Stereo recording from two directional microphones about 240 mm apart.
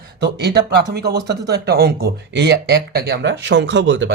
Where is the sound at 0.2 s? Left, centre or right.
Right.